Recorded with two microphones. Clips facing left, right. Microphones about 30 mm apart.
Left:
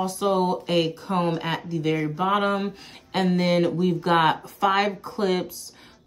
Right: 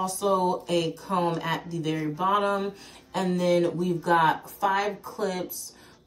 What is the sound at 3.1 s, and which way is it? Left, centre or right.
Speech, left.